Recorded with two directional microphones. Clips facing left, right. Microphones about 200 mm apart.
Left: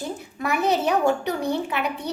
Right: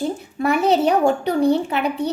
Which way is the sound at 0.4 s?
30° right (ahead or behind).